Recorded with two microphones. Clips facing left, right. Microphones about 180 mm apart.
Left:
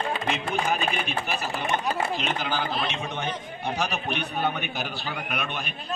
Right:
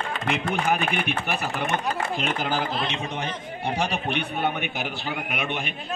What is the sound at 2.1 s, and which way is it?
Speech, 45° right (ahead or behind).